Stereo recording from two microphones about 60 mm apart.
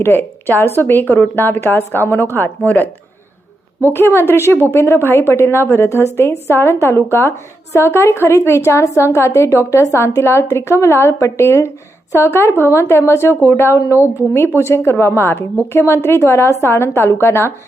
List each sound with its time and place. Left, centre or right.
0.0 s speech: left
3.9 s a woman's voice: left
13.7 s a woman's voice: left
14.0 s a woman's voice: left